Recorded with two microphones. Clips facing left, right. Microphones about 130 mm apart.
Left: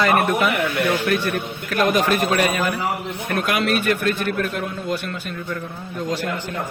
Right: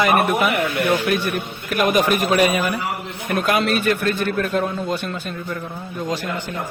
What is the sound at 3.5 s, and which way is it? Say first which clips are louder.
Speech: right 2 dB; 30° right (ahead or behind).